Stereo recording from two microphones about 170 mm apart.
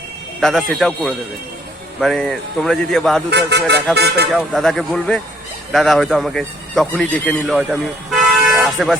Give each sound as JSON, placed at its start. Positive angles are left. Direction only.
{"t": 0.3, "sound": "speech", "side_deg": 0}
{"t": 3.2, "sound": "speech", "side_deg": -80}
{"t": 4.4, "sound": "speech", "side_deg": 0}
{"t": 8.4, "sound": "vehicle", "side_deg": 0}